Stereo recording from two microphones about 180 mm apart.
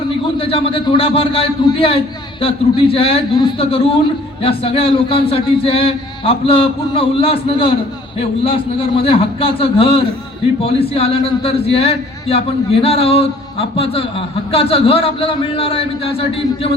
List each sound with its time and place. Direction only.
0.3 s a man's voice: 30° left (ahead or behind)